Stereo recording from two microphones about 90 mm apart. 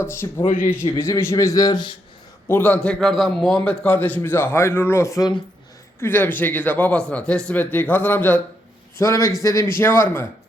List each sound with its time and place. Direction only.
0.0 s a man's voice: 25° left (ahead or behind); by 1.8 s 40° left (ahead or behind)
2.5 s a man's voice: 20° left (ahead or behind)
3.0 s a man's voice: centre (ahead or behind)
3.6 s a man's voice: 10° left (ahead or behind); by 5.3 s 35° left (ahead or behind)
6.0 s a man's voice: 20° left (ahead or behind)
9.0 s a man's voice: 35° left (ahead or behind)